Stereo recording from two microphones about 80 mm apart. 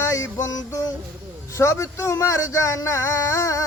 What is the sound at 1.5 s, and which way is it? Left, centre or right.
Speech, left.